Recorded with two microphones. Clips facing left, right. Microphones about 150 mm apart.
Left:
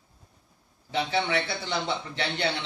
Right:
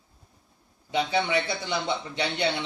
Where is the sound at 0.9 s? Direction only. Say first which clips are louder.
Right 2 dB; 15° right (ahead or behind).